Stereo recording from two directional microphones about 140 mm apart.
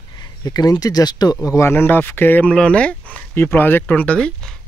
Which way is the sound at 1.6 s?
15° left (ahead or behind).